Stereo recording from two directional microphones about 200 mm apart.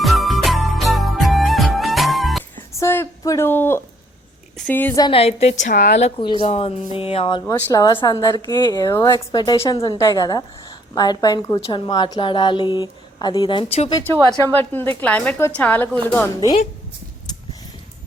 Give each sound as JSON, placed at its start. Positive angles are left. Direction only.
{"t": 0.0, "sound": "music", "side_deg": 0}
{"t": 2.7, "sound": "a sound", "side_deg": 15}
{"t": 4.5, "sound": "a woman's voice", "side_deg": 5}
{"t": 5.0, "sound": "a woman's voice", "side_deg": 30}
{"t": 6.0, "sound": "a woman's voice", "side_deg": 30}
{"t": 14.5, "sound": "a woman's voice", "side_deg": 10}